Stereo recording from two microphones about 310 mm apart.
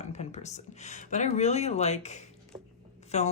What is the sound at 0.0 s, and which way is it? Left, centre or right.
Speech, left.